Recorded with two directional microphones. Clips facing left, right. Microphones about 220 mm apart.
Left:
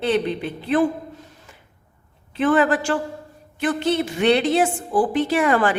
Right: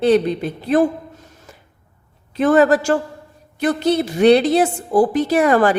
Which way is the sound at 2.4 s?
40° right (ahead or behind).